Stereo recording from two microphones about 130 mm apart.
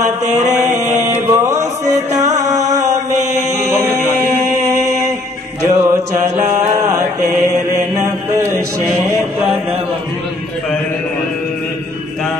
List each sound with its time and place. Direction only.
0.0 s mantra: 65° right (ahead or behind)
1.1 s music: 20° right (ahead or behind)
3.7 s music: 20° right (ahead or behind)
5.7 s mantra: 25° right (ahead or behind)